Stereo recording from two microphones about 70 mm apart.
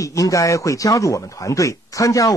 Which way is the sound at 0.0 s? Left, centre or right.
Left.